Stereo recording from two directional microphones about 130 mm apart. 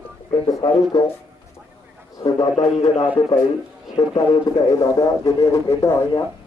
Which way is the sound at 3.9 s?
35° left (ahead or behind).